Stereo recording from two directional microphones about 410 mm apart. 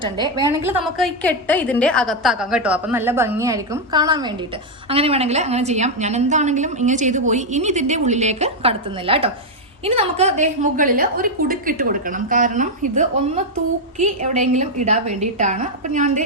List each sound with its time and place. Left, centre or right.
0.0 s a woman's voice: centre